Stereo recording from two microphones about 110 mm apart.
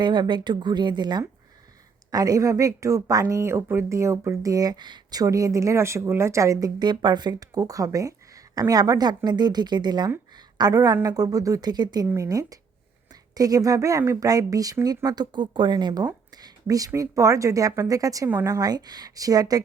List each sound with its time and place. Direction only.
0.0 s a woman's voice: 45° right (ahead or behind)
10.3 s a sound: 35° right (ahead or behind)
10.9 s a woman's voice: 35° right (ahead or behind)
12.0 s a woman's voice: 25° right (ahead or behind)